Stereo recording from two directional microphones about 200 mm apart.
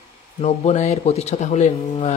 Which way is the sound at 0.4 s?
35° left (ahead or behind).